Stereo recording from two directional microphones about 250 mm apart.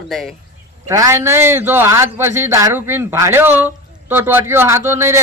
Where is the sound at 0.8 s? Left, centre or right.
Centre.